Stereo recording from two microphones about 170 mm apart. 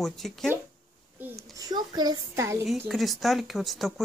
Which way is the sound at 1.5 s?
25° right (ahead or behind).